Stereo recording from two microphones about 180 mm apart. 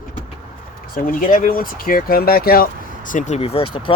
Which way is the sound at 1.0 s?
50° left (ahead or behind).